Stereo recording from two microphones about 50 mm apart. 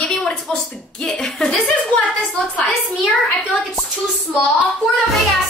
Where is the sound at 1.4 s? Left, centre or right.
Left.